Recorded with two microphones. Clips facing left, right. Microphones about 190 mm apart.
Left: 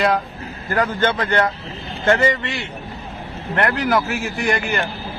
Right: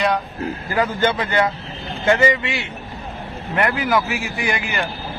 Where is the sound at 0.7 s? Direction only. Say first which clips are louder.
Left 1 dB; 5° right (ahead or behind).